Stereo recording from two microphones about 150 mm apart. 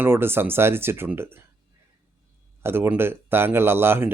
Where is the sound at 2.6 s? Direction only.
15° right (ahead or behind).